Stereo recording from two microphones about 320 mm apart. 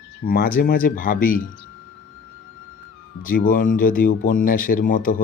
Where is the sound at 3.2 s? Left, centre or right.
Left.